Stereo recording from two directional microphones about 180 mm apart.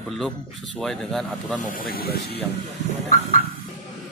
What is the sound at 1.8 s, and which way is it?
Speech, 55° left (ahead or behind).